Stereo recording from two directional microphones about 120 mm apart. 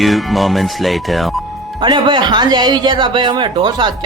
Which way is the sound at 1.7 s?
40° right (ahead or behind).